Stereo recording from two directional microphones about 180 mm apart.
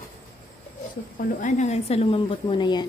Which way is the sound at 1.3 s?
40° left (ahead or behind).